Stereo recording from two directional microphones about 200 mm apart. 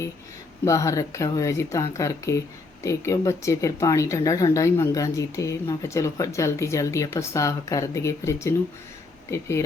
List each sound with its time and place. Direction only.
0.6 s speech: 15° left (ahead or behind)